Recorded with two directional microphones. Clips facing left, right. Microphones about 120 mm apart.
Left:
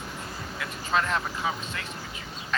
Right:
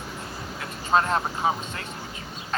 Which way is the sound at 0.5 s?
35° right (ahead or behind).